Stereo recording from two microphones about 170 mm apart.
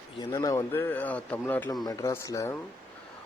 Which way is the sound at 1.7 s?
20° left (ahead or behind).